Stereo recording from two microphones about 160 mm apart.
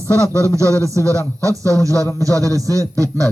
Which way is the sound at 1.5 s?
20° right (ahead or behind).